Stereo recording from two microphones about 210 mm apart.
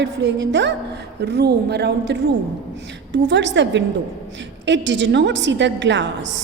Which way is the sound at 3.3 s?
55° right (ahead or behind).